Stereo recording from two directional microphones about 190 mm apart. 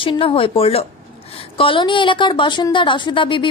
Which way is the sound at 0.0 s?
30° left (ahead or behind).